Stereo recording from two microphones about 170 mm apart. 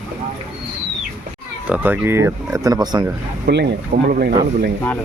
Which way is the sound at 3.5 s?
60° right (ahead or behind).